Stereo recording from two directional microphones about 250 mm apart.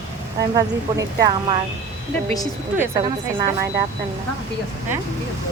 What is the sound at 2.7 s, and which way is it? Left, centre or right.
Speech, centre.